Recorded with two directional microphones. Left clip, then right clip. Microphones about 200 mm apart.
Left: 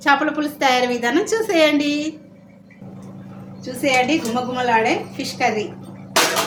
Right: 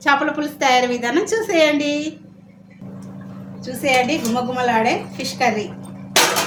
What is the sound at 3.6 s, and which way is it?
A woman's voice, 15° left (ahead or behind).